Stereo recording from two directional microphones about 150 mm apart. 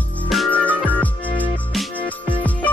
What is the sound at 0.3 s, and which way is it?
Music, 5° left (ahead or behind).